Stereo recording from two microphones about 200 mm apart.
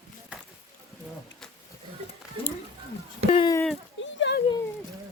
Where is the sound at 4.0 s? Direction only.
65° left (ahead or behind).